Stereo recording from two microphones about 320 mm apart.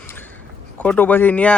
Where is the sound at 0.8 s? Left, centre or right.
Centre.